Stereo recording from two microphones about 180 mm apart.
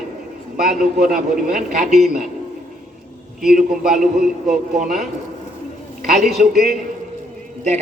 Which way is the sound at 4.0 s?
50° right (ahead or behind).